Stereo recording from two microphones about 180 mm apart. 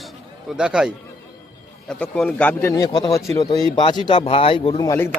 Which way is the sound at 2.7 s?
20° left (ahead or behind).